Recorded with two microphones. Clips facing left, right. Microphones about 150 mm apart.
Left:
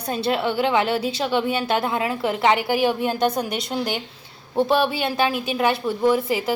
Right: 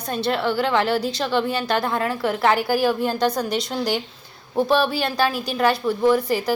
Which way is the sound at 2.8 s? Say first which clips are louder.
Even; 10° left (ahead or behind).